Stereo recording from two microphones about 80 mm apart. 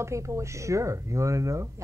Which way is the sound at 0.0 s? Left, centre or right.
Right.